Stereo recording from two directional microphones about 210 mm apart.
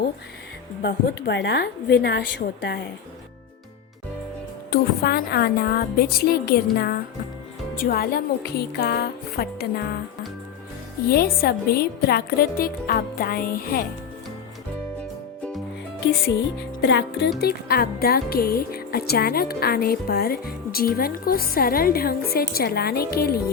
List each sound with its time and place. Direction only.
0.8 s speech: 55° left (ahead or behind)
4.7 s speech: 45° left (ahead or behind)
11.1 s speech: 45° left (ahead or behind)
16.8 s speech: 55° left (ahead or behind)